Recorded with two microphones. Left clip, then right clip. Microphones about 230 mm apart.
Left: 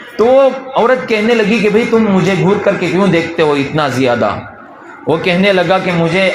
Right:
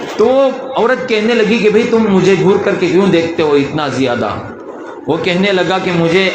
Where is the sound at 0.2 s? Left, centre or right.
Left.